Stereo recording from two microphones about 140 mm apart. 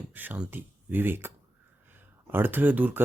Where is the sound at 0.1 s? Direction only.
10° right (ahead or behind).